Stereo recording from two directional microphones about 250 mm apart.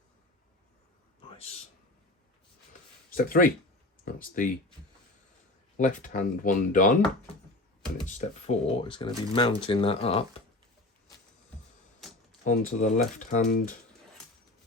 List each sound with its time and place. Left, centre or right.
3.2 s speech: left
5.7 s speech: left
8.0 s speech: left
12.5 s speech: left